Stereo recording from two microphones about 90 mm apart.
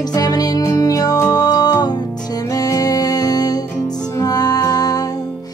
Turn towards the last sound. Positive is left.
turn(degrees=45)  # may be behind; listen again after turning